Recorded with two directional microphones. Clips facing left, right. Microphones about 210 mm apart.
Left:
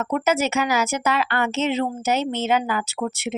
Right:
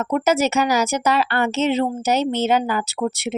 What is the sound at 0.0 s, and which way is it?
Speech, 40° right (ahead or behind).